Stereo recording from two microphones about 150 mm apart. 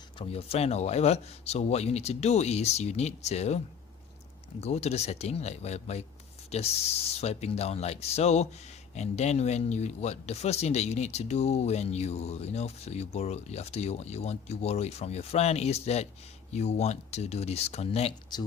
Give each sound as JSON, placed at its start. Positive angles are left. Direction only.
{"t": 0.2, "sound": "speech", "side_deg": 40}
{"t": 4.6, "sound": "speech", "side_deg": 45}
{"t": 18.3, "sound": "speech", "side_deg": 30}